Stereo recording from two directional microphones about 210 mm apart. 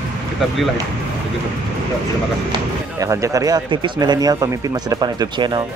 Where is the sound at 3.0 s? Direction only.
15° right (ahead or behind).